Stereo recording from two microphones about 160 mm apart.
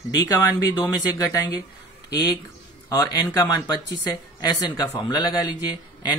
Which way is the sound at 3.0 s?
20° left (ahead or behind).